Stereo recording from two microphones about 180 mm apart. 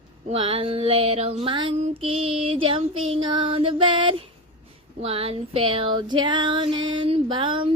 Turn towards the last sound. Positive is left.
turn(degrees=-30)  # may be behind; listen again after turning